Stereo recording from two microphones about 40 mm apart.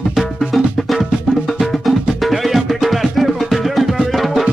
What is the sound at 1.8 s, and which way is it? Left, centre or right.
Music, centre.